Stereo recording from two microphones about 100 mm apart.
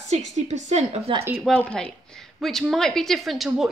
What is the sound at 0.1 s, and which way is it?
A woman's voice, 90° right.